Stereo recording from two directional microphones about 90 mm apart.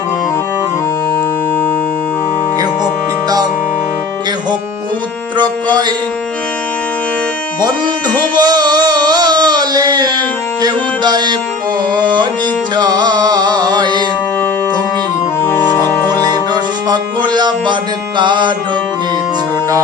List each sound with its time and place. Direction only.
2.6 s music: 50° right (ahead or behind)
5.4 s music: 55° right (ahead or behind)
8.4 s a sound: 50° right (ahead or behind)
10.6 s music: 50° right (ahead or behind)
15.4 s music: 25° left (ahead or behind)
16.0 s music: 50° right (ahead or behind)